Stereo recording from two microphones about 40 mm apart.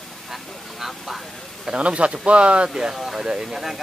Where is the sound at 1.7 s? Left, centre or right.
Right.